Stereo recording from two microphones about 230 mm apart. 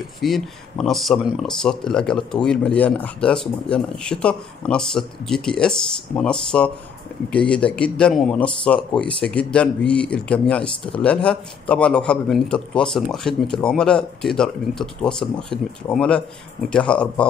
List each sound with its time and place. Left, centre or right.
0.2 s speech: centre